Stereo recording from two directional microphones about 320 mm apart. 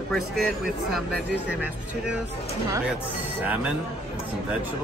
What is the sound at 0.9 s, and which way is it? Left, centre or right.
Speech, centre.